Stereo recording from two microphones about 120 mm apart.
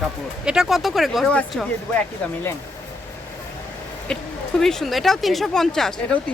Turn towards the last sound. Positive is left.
turn(degrees=5)  # may be behind; listen again after turning